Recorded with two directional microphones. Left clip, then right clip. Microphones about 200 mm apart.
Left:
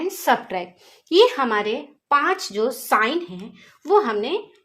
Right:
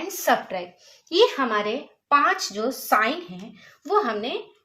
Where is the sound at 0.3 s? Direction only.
50° left (ahead or behind).